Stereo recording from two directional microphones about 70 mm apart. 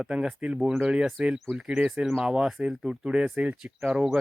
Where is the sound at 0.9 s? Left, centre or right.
Centre.